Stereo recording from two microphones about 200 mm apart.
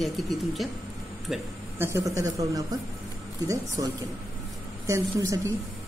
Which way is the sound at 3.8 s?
20° right (ahead or behind).